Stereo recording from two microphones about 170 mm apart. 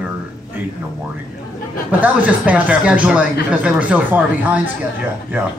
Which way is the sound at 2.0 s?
10° right (ahead or behind).